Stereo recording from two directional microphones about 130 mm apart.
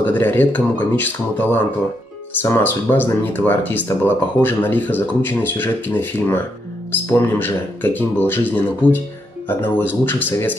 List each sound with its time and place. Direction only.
0.0 s speech: 15° left (ahead or behind)